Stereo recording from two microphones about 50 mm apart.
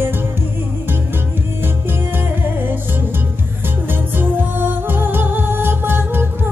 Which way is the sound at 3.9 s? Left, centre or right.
Right.